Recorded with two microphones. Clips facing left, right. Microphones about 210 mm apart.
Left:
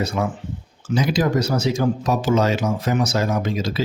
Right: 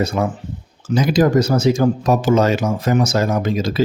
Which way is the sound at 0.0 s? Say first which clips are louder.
Right 4 dB; 45° right (ahead or behind).